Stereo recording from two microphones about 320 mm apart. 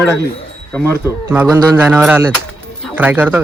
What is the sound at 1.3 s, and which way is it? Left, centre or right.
Speech, centre.